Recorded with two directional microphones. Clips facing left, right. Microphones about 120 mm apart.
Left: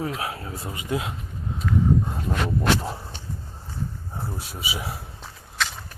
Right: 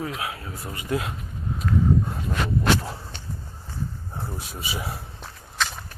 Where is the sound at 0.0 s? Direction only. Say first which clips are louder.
Left 2 dB; 30° left (ahead or behind).